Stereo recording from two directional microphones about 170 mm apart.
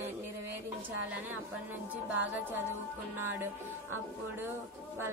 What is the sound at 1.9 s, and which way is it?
Speech, 10° right (ahead or behind).